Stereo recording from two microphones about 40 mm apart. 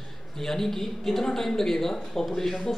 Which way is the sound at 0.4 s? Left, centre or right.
Centre.